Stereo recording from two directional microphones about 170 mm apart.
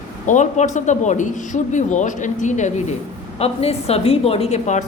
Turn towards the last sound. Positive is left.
turn(degrees=45)  # may be behind; listen again after turning